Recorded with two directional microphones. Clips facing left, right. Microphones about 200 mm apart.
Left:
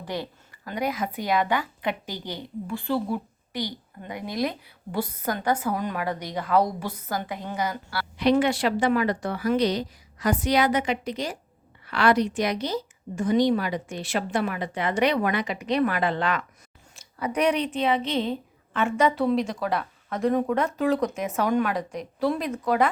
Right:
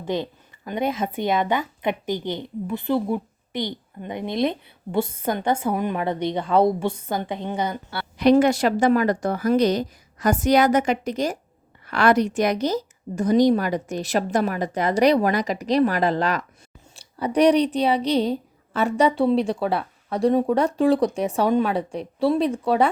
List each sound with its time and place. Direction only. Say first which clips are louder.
0.0 s speech: right 6 dB; 20° right (ahead or behind)
8.2 s a woman's voice: right 5 dB; 45° right (ahead or behind)